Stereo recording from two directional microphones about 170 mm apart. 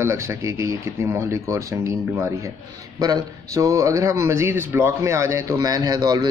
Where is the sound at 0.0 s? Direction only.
15° right (ahead or behind).